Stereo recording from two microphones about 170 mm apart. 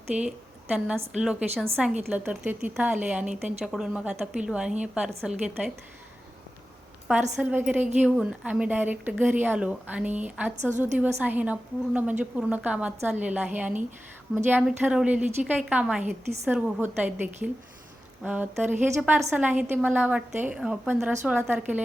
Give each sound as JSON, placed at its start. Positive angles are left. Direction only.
{"t": 0.1, "sound": "a woman's voice", "side_deg": -5}
{"t": 7.3, "sound": "speech", "side_deg": -5}
{"t": 10.7, "sound": "a woman's voice", "side_deg": -45}
{"t": 11.2, "sound": "speech", "side_deg": -10}